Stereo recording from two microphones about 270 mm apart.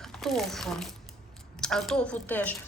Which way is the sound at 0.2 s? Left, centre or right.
Centre.